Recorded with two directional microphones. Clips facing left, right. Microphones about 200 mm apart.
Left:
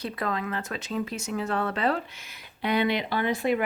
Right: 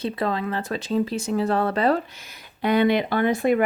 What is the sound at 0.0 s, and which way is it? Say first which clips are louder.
Speech: right 5 dB; 30° right (ahead or behind).